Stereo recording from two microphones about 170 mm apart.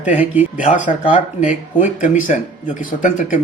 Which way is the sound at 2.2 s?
50° left (ahead or behind).